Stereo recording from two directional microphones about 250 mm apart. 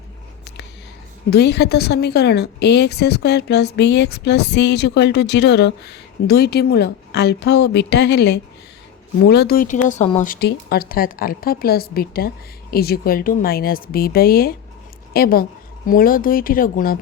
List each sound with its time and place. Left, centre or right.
1.3 s a woman's voice: left